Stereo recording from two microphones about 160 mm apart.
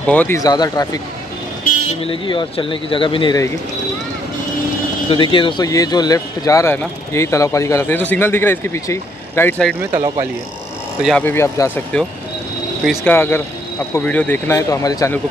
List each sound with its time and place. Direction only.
0.0 s a man's voice: 10° left (ahead or behind)
0.4 s speech: 25° left (ahead or behind)
2.0 s speech: 35° left (ahead or behind)
5.1 s a man's voice: 30° left (ahead or behind); by 9.8 s 10° left (ahead or behind)
9.9 s speech: 25° right (ahead or behind)
11.0 s speech: centre (ahead or behind)
11.2 s a man's voice: 15° left (ahead or behind)
12.8 s speech: centre (ahead or behind)
13.1 s a man's voice: 15° left (ahead or behind)